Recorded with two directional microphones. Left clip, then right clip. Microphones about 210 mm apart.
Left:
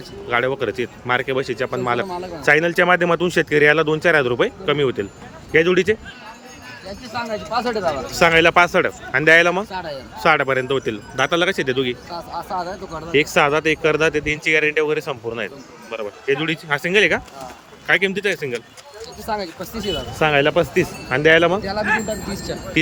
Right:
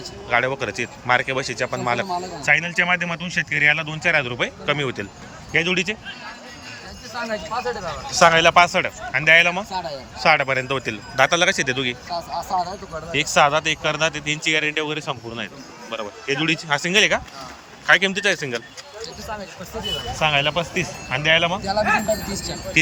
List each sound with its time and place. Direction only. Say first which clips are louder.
0.3 s speech: left 1 dB; 10° left (ahead or behind)
2.4 s speech: left 4 dB; 25° left (ahead or behind)
7.1 s speech: left 2 dB; 45° left (ahead or behind)
8.1 s speech: right 1 dB; 10° left (ahead or behind)
9.7 s speech: even; 5° left (ahead or behind)
10.2 s speech: left 1 dB; 15° left (ahead or behind)
19.3 s speech: left 8 dB; 55° left (ahead or behind)
20.1 s speech: left 4 dB; 20° left (ahead or behind)
21.6 s speech: right 1 dB; centre (ahead or behind)